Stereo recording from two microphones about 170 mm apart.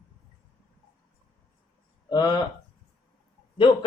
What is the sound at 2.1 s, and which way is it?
Speech, 25° left (ahead or behind).